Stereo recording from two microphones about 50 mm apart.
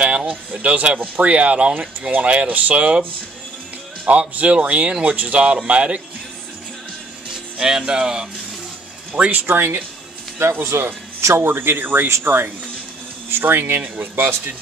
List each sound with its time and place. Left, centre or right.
0.0 s a sound: right
0.3 s speech: right
4.0 s speech: right
7.5 s speech: centre
9.1 s speech: right
9.5 s speech: right
10.4 s a man's voice: right
11.5 s speech: right